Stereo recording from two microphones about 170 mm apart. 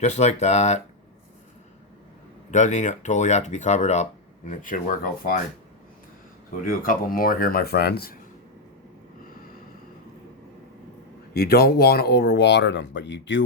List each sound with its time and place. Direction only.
0.0 s speech: 40° left (ahead or behind)
2.5 s speech: 45° left (ahead or behind)
4.4 s speech: 50° left (ahead or behind)
6.7 s speech: 55° left (ahead or behind)
11.3 s speech: 65° left (ahead or behind); by 13.4 s 90° left